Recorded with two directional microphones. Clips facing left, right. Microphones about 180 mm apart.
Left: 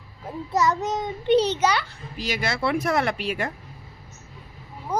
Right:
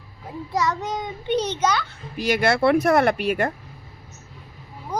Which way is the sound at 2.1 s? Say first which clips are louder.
Right 7 dB; 60° right (ahead or behind).